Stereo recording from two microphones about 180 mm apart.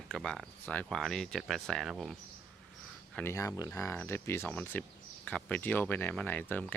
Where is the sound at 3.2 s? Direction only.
15° left (ahead or behind).